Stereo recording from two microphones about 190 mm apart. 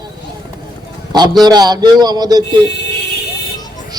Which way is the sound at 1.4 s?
20° right (ahead or behind).